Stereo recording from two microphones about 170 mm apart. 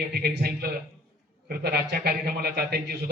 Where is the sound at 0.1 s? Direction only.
70° right (ahead or behind).